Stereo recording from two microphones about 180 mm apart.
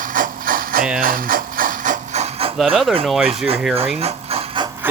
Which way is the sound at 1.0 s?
50° right (ahead or behind).